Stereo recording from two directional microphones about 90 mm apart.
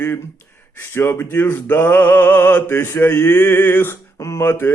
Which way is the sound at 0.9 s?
25° left (ahead or behind).